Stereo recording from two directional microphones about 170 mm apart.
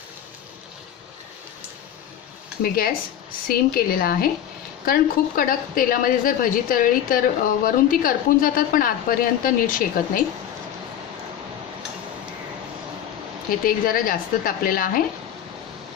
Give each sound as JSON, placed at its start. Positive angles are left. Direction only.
{"t": 2.6, "sound": "a woman's voice", "side_deg": 60}
{"t": 13.7, "sound": "a woman's voice", "side_deg": 55}